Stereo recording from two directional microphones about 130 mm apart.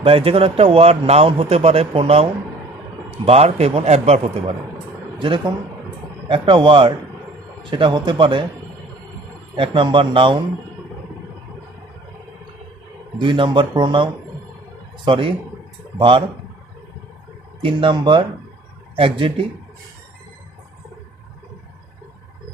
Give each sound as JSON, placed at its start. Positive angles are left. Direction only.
{"t": 0.0, "sound": "a man's voice", "side_deg": -45}
{"t": 5.2, "sound": "speech", "side_deg": -40}
{"t": 9.6, "sound": "speech", "side_deg": -40}
{"t": 13.1, "sound": "speech", "side_deg": -40}
{"t": 17.6, "sound": "a man's voice", "side_deg": -40}